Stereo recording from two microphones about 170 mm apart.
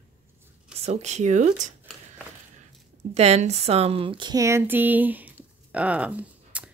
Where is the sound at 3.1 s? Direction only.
40° right (ahead or behind); by 6.7 s 10° right (ahead or behind).